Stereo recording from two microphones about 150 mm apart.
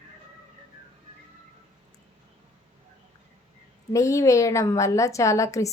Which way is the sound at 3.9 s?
20° left (ahead or behind).